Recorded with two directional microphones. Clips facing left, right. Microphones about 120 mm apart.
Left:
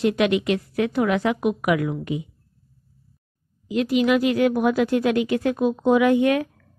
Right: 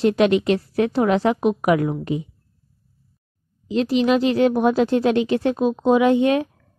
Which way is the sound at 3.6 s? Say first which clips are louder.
Right 1 dB; 30° right (ahead or behind).